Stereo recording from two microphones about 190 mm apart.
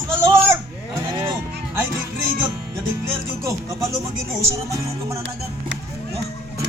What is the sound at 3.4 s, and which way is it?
Speech, 15° right (ahead or behind).